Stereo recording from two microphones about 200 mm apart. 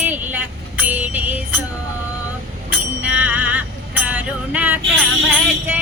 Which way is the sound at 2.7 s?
5° right (ahead or behind).